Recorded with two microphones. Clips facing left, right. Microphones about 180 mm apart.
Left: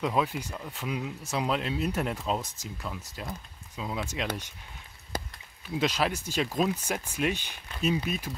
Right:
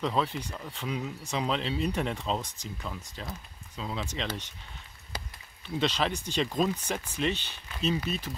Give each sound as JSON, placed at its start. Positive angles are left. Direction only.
{"t": 0.0, "sound": "speech", "side_deg": 10}
{"t": 5.1, "sound": "a sound", "side_deg": 50}
{"t": 5.8, "sound": "speech", "side_deg": 10}